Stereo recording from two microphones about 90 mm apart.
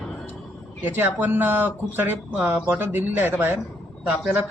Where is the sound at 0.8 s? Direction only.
20° right (ahead or behind).